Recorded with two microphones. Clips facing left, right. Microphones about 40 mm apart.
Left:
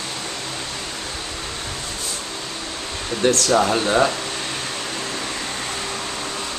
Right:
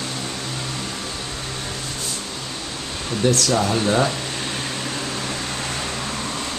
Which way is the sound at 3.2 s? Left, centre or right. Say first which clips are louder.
Left 2 dB; left.